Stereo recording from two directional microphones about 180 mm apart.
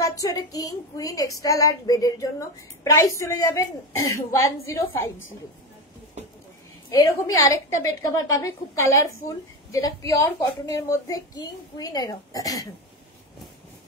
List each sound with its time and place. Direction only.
0.0 s a child's voice: 20° left (ahead or behind)
6.9 s a woman's voice: 20° left (ahead or behind)